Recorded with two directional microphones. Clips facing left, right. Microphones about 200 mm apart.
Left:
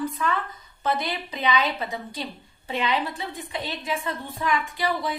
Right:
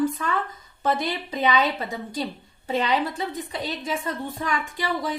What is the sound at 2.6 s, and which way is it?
A woman's voice, 40° right (ahead or behind).